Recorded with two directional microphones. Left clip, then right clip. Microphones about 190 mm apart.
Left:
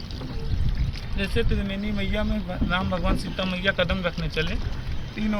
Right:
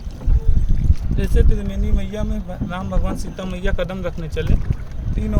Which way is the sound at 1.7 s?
55° right (ahead or behind).